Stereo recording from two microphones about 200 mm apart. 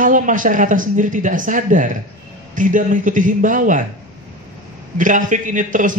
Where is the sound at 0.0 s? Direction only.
40° right (ahead or behind).